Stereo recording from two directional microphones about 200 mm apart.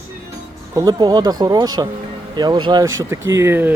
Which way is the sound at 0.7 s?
20° right (ahead or behind).